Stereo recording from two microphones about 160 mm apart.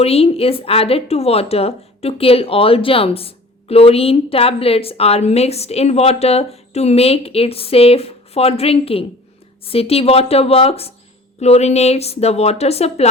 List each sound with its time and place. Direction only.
0.0 s speech: 40° left (ahead or behind)